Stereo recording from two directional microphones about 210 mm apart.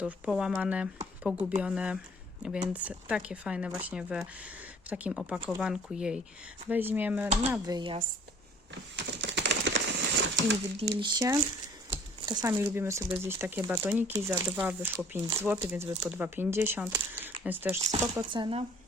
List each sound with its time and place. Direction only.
0.0 s speech: 5° right (ahead or behind)
7.7 s speech: 20° right (ahead or behind)
8.7 s a sound: 55° right (ahead or behind)
10.9 s speech: 20° right (ahead or behind)